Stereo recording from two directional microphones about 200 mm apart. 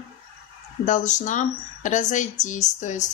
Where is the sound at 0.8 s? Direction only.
40° left (ahead or behind).